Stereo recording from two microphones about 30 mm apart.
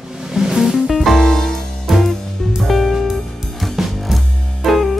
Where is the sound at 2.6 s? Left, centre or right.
Centre.